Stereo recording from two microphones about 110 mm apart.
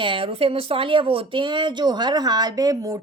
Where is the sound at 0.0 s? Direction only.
55° right (ahead or behind).